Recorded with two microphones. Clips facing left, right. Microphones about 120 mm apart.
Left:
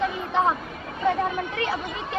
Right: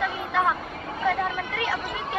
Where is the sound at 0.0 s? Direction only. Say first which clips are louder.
Left 2 dB; 25° left (ahead or behind).